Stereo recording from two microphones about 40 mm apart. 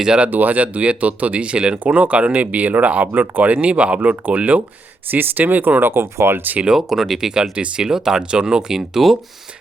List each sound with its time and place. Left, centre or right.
0.3 s speech: right
3.5 s speech: right
5.1 s speech: right
5.8 s speech: right
6.7 s speech: centre
7.2 s speech: centre
8.2 s speech: right